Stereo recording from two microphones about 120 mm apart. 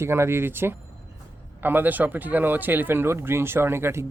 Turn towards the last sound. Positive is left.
turn(degrees=-20)  # may be behind; listen again after turning